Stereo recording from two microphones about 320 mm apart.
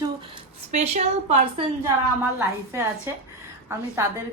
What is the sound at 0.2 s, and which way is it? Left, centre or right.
A woman's voice, centre.